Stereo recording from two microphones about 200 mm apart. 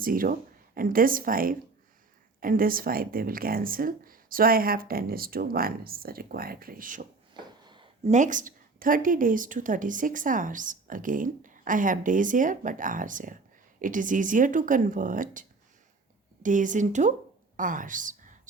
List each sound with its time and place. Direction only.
0.0 s speech: 45° right (ahead or behind)
7.3 s a sound: 25° right (ahead or behind)
8.1 s a woman's voice: 40° right (ahead or behind)